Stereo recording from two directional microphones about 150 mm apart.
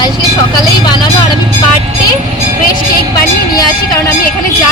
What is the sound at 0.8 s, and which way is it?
Speech, 30° left (ahead or behind).